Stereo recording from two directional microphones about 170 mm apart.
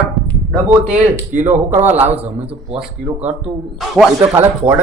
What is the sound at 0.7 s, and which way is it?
Speech, 10° right (ahead or behind).